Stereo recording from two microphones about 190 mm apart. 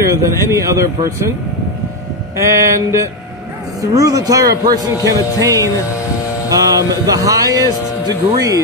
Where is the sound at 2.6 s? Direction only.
15° right (ahead or behind).